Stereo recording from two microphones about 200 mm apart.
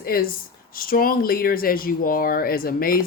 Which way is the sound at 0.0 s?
45° left (ahead or behind).